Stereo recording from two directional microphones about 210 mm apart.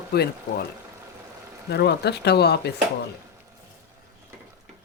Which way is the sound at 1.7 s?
50° left (ahead or behind).